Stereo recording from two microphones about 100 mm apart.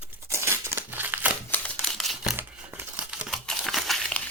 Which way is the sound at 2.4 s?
20° right (ahead or behind).